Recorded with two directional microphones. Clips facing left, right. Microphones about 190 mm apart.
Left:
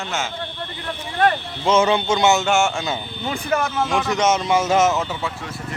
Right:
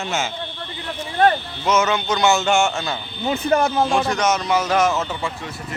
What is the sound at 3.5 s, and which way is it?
Speech, 35° right (ahead or behind).